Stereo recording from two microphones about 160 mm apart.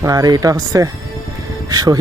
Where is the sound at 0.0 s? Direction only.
20° right (ahead or behind).